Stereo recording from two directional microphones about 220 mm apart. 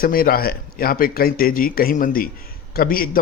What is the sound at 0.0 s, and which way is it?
A man's voice, 40° left (ahead or behind).